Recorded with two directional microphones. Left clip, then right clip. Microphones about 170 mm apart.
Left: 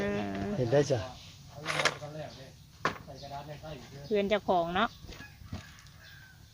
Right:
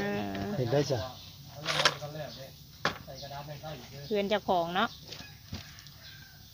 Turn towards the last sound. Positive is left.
turn(degrees=5)  # may be behind; listen again after turning